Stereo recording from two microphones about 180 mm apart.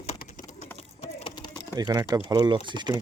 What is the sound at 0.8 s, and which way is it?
Typing, 30° left (ahead or behind).